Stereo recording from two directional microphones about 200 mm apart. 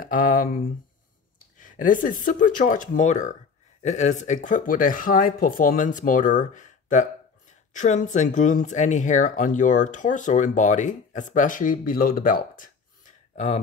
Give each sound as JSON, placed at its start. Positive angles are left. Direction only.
{"t": 0.0, "sound": "speech", "side_deg": 40}
{"t": 1.6, "sound": "speech", "side_deg": 40}